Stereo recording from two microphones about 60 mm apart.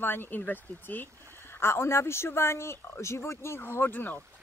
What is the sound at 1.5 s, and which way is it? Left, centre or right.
Speech, left.